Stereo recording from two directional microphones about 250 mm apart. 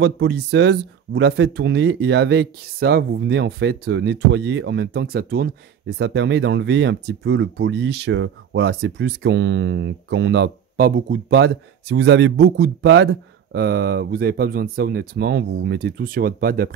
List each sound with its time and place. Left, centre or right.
0.0 s speech: right